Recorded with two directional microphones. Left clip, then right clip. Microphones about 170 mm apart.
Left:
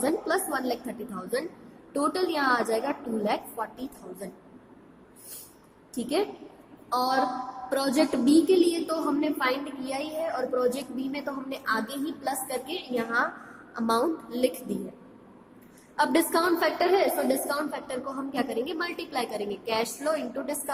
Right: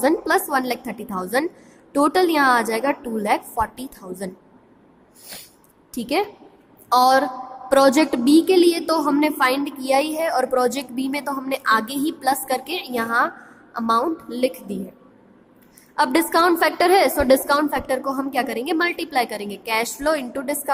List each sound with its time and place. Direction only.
0.0 s a woman's voice: 40° right (ahead or behind)
5.9 s a woman's voice: 40° right (ahead or behind)
16.0 s a woman's voice: 40° right (ahead or behind)